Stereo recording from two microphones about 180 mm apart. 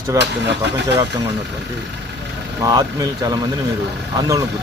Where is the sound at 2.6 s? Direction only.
20° right (ahead or behind).